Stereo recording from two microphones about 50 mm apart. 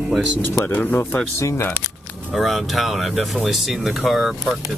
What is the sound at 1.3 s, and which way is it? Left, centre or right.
Speech, left.